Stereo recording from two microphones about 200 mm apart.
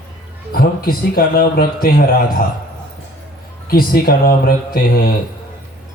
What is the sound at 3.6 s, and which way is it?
Speech, 50° left (ahead or behind).